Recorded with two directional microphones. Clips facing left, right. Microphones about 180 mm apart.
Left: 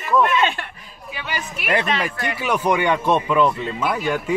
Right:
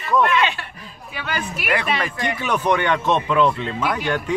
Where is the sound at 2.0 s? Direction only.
10° left (ahead or behind).